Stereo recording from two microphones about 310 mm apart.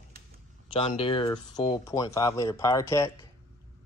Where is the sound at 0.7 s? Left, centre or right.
Centre.